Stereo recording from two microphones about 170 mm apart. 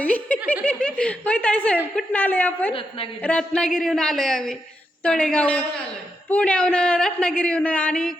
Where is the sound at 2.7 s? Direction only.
30° left (ahead or behind).